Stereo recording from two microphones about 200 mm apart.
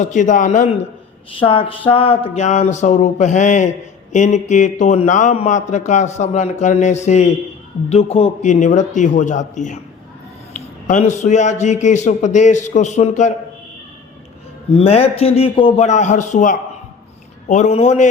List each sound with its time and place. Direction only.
0.0 s speech: 40° left (ahead or behind)
1.3 s speech: 25° left (ahead or behind)
14.8 s speech: 30° left (ahead or behind)